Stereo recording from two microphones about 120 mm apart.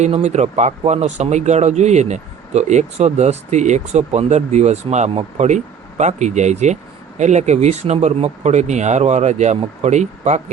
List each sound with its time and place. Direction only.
0.0 s speech: 65° right (ahead or behind)